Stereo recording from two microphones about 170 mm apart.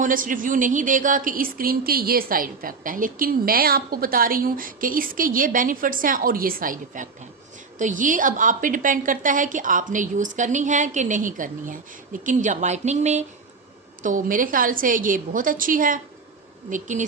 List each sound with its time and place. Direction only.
0.0 s a woman's voice: 50° right (ahead or behind)